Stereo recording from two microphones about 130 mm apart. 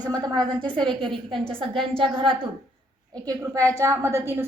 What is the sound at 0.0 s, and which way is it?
Speech, 30° right (ahead or behind).